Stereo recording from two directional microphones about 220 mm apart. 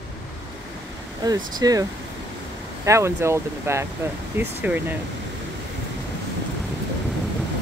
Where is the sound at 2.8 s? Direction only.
10° right (ahead or behind).